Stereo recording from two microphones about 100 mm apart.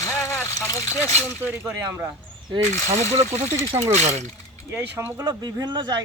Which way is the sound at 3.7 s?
30° right (ahead or behind).